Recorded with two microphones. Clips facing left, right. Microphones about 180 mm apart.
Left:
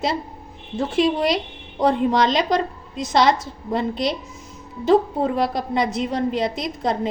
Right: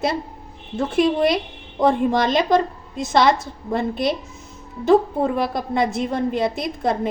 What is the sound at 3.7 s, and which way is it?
A woman's voice, 55° right (ahead or behind).